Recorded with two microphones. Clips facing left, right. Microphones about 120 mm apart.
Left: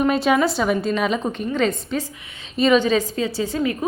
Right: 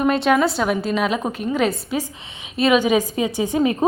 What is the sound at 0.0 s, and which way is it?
A woman's voice, centre (ahead or behind).